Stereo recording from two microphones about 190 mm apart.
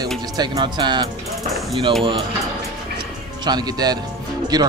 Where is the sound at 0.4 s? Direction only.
20° right (ahead or behind).